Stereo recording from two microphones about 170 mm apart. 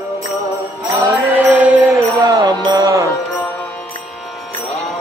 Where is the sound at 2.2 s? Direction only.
25° right (ahead or behind).